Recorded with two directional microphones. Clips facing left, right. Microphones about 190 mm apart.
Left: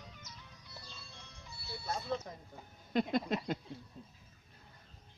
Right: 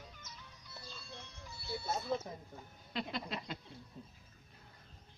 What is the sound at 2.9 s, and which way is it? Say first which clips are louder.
Speech: left 9 dB; 45° left (ahead or behind).